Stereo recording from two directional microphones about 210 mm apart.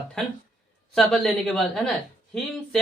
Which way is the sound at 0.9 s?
Centre (ahead or behind).